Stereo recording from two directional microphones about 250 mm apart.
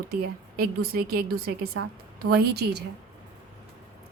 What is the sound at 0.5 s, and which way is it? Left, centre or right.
Speech, right.